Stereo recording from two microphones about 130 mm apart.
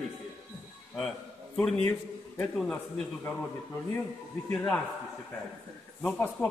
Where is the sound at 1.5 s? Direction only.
5° left (ahead or behind).